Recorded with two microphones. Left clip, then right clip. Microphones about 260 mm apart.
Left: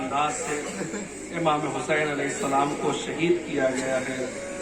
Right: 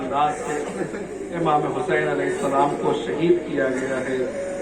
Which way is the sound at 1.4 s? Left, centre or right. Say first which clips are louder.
Right 4 dB; left.